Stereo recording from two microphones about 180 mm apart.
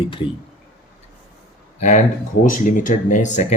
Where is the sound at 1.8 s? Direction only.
40° left (ahead or behind).